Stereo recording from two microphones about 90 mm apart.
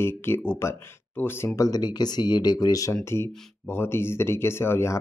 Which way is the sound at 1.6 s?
45° left (ahead or behind).